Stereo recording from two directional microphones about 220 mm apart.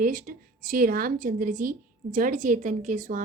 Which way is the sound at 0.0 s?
40° right (ahead or behind).